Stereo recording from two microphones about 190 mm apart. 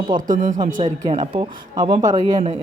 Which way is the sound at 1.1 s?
25° right (ahead or behind).